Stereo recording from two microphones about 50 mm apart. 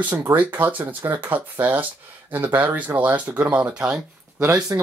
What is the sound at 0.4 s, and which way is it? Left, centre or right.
Speech, right.